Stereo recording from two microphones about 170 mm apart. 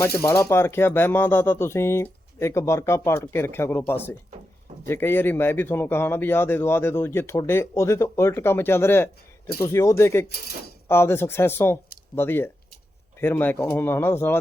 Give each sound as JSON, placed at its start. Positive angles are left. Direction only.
{"t": 0.0, "sound": "speech", "side_deg": 15}